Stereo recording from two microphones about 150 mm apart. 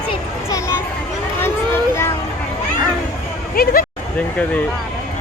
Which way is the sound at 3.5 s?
75° left (ahead or behind).